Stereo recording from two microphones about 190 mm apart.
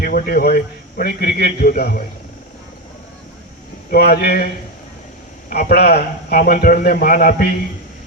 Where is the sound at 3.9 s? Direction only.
55° left (ahead or behind).